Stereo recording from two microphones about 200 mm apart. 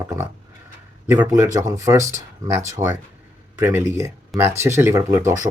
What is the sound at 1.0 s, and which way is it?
Speech, 10° right (ahead or behind).